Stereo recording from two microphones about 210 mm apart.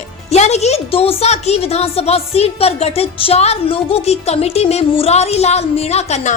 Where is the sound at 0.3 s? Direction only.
30° left (ahead or behind).